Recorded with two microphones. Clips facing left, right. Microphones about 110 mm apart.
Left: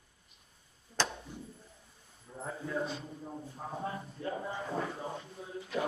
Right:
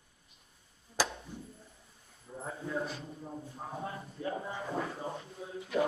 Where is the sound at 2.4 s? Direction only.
Centre (ahead or behind).